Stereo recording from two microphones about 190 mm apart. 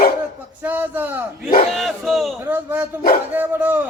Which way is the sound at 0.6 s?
10° right (ahead or behind).